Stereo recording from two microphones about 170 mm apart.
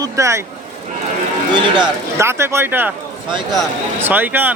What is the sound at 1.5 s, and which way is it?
Speech, 30° right (ahead or behind).